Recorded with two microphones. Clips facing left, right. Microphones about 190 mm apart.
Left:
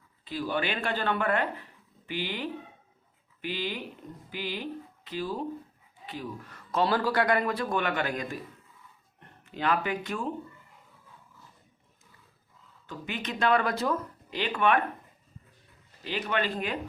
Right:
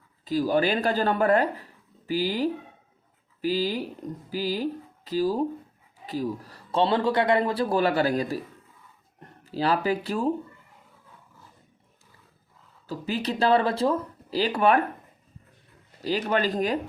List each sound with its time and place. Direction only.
0.3 s a man's voice: 40° right (ahead or behind)
12.9 s a man's voice: 35° right (ahead or behind)
16.0 s a man's voice: 35° right (ahead or behind)